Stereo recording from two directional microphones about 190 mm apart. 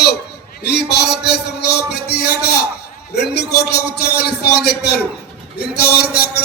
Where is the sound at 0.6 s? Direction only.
60° left (ahead or behind).